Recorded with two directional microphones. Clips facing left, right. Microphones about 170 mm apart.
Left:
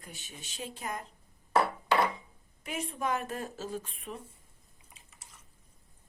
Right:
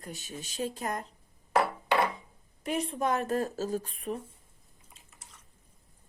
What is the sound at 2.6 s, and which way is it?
Speech, 35° right (ahead or behind).